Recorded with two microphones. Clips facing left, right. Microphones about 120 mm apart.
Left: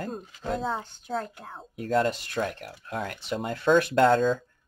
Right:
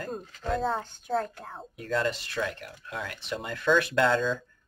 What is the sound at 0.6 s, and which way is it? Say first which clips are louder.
Speech: right 1 dB; centre (ahead or behind).